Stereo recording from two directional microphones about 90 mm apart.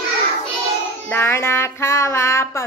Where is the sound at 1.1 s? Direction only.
25° left (ahead or behind).